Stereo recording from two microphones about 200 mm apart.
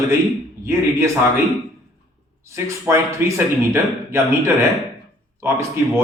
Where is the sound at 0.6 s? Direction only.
10° right (ahead or behind).